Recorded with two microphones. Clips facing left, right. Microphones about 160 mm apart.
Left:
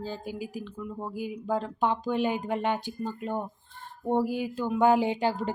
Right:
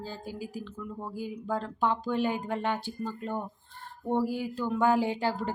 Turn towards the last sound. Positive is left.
turn(degrees=15)  # may be behind; listen again after turning